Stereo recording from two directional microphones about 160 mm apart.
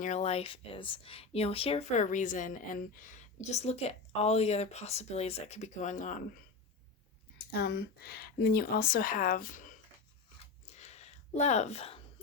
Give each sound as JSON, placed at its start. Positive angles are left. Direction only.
{"t": 0.0, "sound": "speech", "side_deg": 45}
{"t": 7.5, "sound": "speech", "side_deg": 85}
{"t": 10.7, "sound": "a sound", "side_deg": 45}